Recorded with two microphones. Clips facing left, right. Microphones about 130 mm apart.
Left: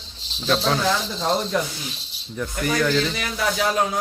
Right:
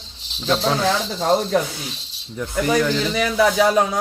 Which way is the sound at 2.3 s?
20° right (ahead or behind).